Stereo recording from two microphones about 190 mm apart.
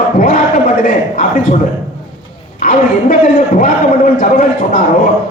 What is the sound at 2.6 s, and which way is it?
A man's voice, 45° left (ahead or behind).